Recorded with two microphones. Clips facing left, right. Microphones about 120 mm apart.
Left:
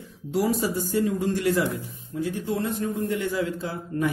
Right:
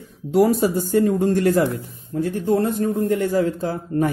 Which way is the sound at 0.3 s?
55° right (ahead or behind).